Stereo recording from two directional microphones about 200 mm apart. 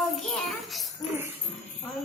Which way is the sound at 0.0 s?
Centre (ahead or behind).